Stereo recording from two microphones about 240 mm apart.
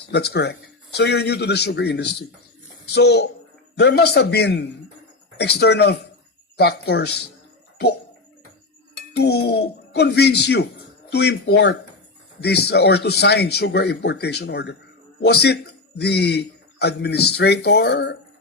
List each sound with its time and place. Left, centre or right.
0.1 s speech: left
9.1 s a man's voice: left